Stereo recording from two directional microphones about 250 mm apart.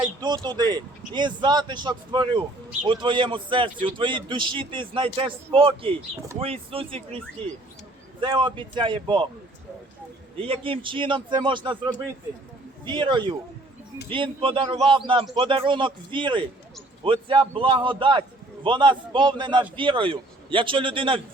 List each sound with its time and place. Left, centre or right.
0.2 s a man's voice: centre
8.2 s a man's voice: centre
10.4 s a man's voice: right